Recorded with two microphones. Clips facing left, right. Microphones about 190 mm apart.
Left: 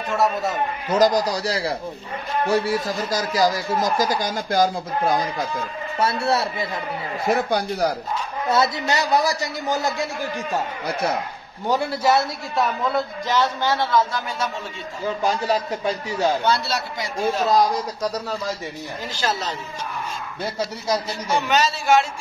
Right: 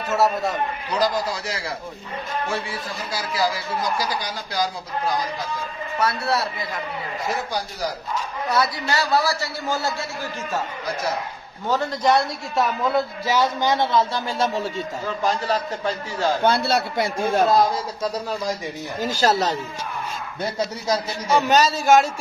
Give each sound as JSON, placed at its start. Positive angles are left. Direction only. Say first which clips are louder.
{"t": 0.1, "sound": "a man's voice", "louder": "right 1 dB", "side_deg": 0}
{"t": 0.8, "sound": "a man's voice", "louder": "left 6 dB", "side_deg": 45}
{"t": 5.9, "sound": "a man's voice", "louder": "left 2 dB", "side_deg": 25}
{"t": 7.2, "sound": "speech", "louder": "left 8 dB", "side_deg": 60}
{"t": 8.5, "sound": "a man's voice", "louder": "left 3 dB", "side_deg": 25}
{"t": 11.6, "sound": "a man's voice", "louder": "left 1 dB", "side_deg": 10}
{"t": 15.0, "sound": "a man's voice", "louder": "left 2 dB", "side_deg": 15}
{"t": 16.4, "sound": "a man's voice", "louder": "right 3 dB", "side_deg": -55}
{"t": 19.0, "sound": "a man's voice", "louder": "right 6 dB", "side_deg": -40}
{"t": 21.5, "sound": "a man's voice", "louder": "right 2 dB", "side_deg": -40}